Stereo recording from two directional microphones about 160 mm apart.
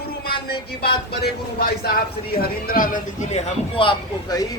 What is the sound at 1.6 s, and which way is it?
Speech, 70° left (ahead or behind).